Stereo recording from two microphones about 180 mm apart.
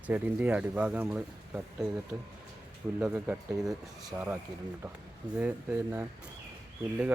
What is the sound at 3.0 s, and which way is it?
Speech, 10° right (ahead or behind).